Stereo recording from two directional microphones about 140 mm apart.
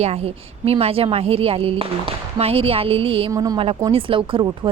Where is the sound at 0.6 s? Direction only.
45° right (ahead or behind).